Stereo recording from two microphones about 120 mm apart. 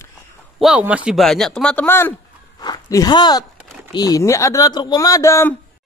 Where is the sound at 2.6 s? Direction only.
30° left (ahead or behind).